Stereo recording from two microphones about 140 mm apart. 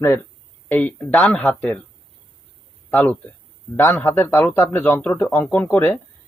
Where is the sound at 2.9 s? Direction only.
10° left (ahead or behind).